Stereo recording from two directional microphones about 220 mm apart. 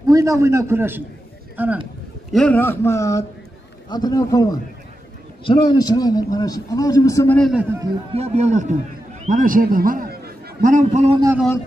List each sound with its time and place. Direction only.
0.0 s a man's voice: 15° right (ahead or behind)
2.3 s a man's voice: 5° left (ahead or behind)
7.3 s a man's voice: centre (ahead or behind)
7.8 s a man's voice: 25° right (ahead or behind)